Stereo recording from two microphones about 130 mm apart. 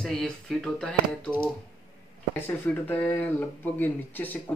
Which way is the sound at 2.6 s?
10° left (ahead or behind).